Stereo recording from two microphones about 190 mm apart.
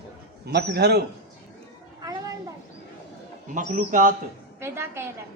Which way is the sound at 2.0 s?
20° right (ahead or behind).